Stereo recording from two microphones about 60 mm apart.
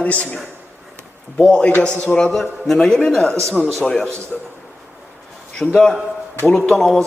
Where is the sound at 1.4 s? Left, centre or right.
Centre.